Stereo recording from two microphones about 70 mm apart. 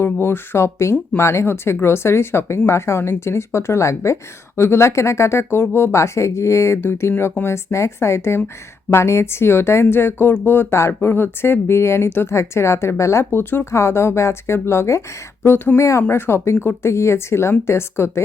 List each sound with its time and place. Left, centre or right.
0.0 s a woman's voice: left
13.3 s a woman's voice: left
15.8 s speech: left
16.0 s a woman's voice: left